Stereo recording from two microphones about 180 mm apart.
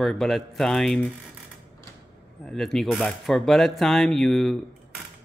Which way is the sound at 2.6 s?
Centre (ahead or behind).